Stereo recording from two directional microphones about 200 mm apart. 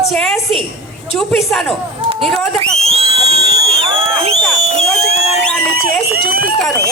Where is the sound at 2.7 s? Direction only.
30° right (ahead or behind).